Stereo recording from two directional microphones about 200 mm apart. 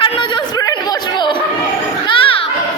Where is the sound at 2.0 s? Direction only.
25° left (ahead or behind).